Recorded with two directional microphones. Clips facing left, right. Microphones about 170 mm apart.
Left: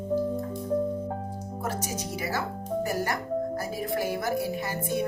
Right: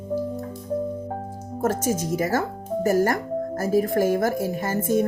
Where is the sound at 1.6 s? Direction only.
50° right (ahead or behind).